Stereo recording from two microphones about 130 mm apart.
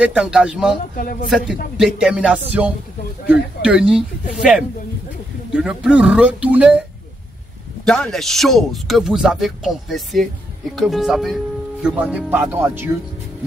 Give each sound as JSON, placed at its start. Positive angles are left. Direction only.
{"t": 0.0, "sound": "a man's voice", "side_deg": -10}
{"t": 7.8, "sound": "a man's voice", "side_deg": 5}